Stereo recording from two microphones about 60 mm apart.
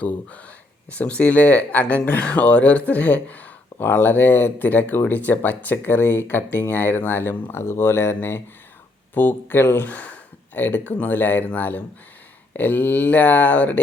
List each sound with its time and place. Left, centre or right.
0.0 s speech: left